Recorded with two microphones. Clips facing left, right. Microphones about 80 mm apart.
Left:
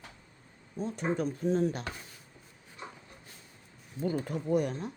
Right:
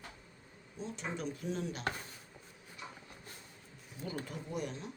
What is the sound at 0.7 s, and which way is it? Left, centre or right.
Speech, left.